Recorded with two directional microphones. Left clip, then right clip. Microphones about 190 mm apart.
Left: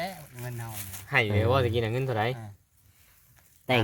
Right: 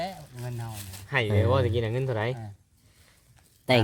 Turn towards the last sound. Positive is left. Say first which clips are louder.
# right 3 dB
turn(degrees=-5)  # may be behind; listen again after turning